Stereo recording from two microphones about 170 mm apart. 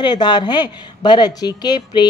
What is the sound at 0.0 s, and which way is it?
A woman's voice, 25° left (ahead or behind).